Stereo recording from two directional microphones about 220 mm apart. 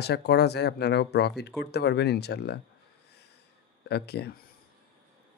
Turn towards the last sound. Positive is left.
turn(degrees=45)  # may be behind; listen again after turning